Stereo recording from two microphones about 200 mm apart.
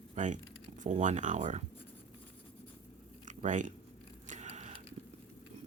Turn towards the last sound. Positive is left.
turn(degrees=-35)  # may be behind; listen again after turning